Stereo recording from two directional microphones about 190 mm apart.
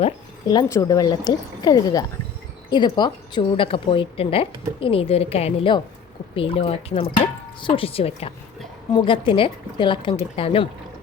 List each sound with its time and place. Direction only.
0.0 s a woman's voice: 20° left (ahead or behind)